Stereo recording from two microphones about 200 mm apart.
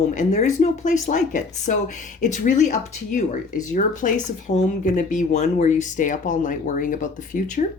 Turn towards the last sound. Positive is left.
turn(degrees=40)  # may be behind; listen again after turning